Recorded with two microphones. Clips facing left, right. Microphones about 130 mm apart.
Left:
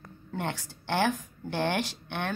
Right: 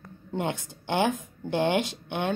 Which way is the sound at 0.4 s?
15° right (ahead or behind).